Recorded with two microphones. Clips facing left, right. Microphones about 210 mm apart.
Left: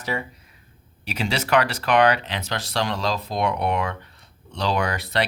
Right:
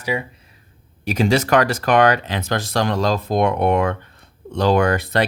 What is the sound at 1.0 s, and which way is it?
Speech, 45° right (ahead or behind).